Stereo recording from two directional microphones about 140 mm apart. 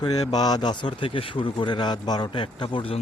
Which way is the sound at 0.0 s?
30° left (ahead or behind).